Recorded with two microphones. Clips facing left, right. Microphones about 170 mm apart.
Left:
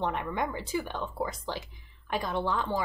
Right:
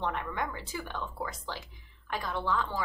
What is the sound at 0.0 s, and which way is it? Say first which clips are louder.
A woman's voice: left 3 dB; 15° left (ahead or behind).